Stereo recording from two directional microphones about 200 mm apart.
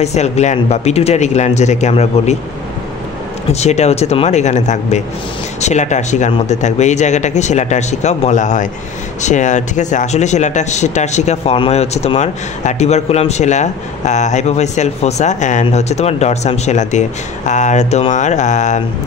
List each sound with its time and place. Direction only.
0.0 s speech: 35° left (ahead or behind)
3.5 s speech: 35° left (ahead or behind)